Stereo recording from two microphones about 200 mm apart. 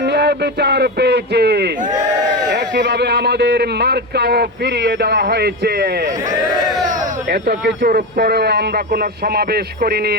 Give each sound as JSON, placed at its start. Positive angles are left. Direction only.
{"t": 0.0, "sound": "speech", "side_deg": -55}
{"t": 7.3, "sound": "speech", "side_deg": -55}